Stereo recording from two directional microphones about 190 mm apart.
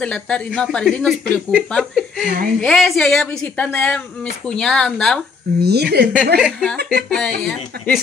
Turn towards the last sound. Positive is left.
turn(degrees=-55)  # may be behind; listen again after turning